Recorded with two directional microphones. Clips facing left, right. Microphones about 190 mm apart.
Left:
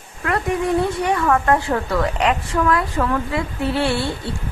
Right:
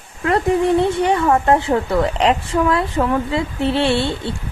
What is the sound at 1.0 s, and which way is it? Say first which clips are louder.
A woman's voice: right 3 dB; 25° right (ahead or behind).